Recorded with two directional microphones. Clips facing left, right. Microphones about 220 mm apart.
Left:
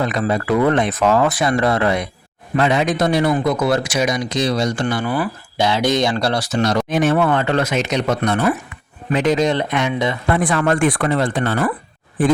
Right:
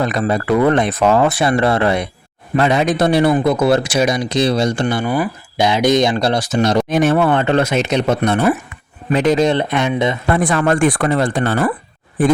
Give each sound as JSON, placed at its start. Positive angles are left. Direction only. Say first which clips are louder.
{"t": 0.0, "sound": "speech", "louder": "right 2 dB", "side_deg": -40}
{"t": 6.9, "sound": "speech", "louder": "right 1 dB", "side_deg": -40}
{"t": 10.2, "sound": "speech", "louder": "right 1 dB", "side_deg": -40}